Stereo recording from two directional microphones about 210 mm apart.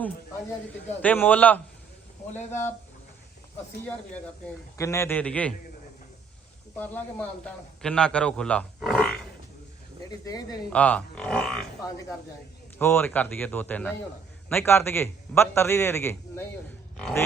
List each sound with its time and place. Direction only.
1.0 s a man's voice: 10° left (ahead or behind)
2.3 s speech: 35° left (ahead or behind)
4.8 s a man's voice: 15° left (ahead or behind)
6.7 s a man's voice: 10° left (ahead or behind)
10.1 s a man's voice: 20° left (ahead or behind)
10.7 s speech: 5° left (ahead or behind)
12.8 s a man's voice: 10° left (ahead or behind)